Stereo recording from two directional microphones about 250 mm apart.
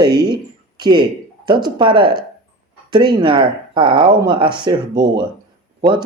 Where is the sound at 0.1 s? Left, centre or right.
Right.